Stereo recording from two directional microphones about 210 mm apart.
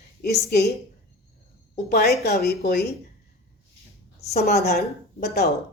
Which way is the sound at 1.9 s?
50° left (ahead or behind).